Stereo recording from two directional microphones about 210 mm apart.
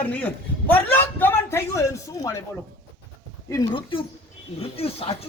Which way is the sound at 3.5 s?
20° left (ahead or behind).